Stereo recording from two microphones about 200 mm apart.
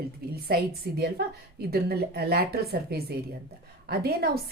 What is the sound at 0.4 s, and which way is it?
A woman's voice, 50° right (ahead or behind).